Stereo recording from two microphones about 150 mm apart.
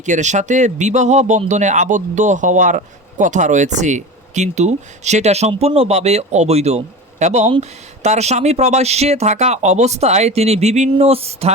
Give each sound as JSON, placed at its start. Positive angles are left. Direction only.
{"t": 0.0, "sound": "speech", "side_deg": -55}